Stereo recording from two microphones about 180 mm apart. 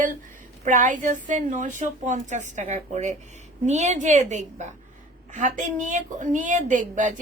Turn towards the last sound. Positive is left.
turn(degrees=-45)  # may be behind; listen again after turning